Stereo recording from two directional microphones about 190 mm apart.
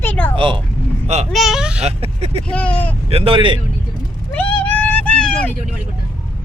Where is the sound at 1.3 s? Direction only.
Centre (ahead or behind).